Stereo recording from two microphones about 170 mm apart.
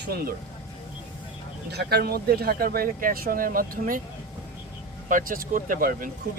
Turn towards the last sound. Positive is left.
turn(degrees=-55)  # may be behind; listen again after turning